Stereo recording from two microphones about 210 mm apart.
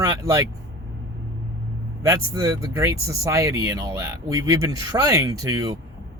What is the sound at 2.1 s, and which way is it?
Speech, 15° right (ahead or behind).